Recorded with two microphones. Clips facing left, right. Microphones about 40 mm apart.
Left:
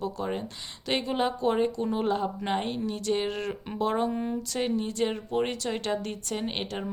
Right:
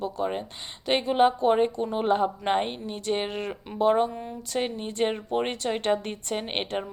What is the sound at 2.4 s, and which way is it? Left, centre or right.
Speech, right.